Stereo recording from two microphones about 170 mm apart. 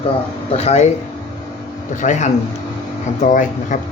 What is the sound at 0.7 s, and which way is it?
Speech, 40° left (ahead or behind).